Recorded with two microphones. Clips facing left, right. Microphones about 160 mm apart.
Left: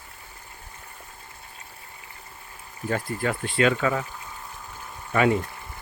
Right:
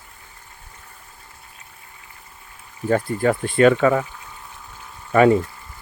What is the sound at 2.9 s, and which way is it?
Speech, 45° right (ahead or behind).